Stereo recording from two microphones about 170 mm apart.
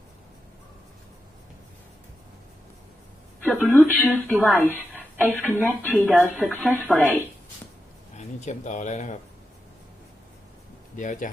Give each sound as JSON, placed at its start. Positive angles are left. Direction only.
{"t": 3.4, "sound": "speech", "side_deg": 0}
{"t": 8.1, "sound": "speech", "side_deg": 45}
{"t": 10.9, "sound": "speech", "side_deg": 50}